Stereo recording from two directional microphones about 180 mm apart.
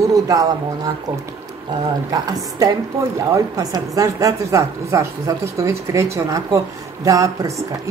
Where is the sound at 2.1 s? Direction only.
20° right (ahead or behind).